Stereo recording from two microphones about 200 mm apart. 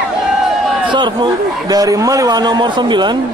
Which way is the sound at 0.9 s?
25° right (ahead or behind).